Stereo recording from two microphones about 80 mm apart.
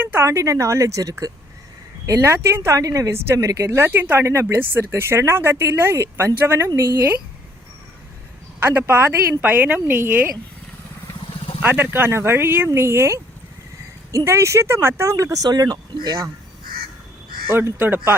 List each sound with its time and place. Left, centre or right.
0.0 s a sound: right
0.3 s speech: right
3.8 s speech: right
6.7 s speech: right
8.6 s speech: right
11.6 s speech: right
14.3 s speech: right
17.5 s speech: right